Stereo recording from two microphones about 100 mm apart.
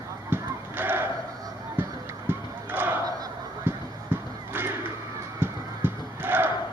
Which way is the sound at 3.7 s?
20° right (ahead or behind).